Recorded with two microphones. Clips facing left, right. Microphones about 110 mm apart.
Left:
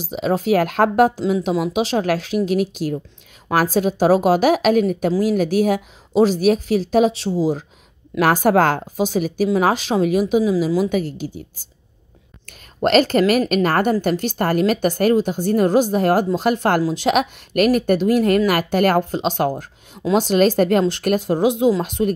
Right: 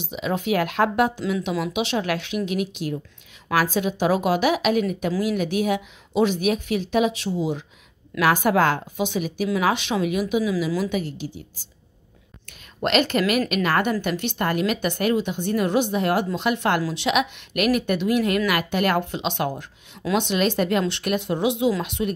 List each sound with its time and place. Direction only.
0.0 s a woman's voice: 40° left (ahead or behind)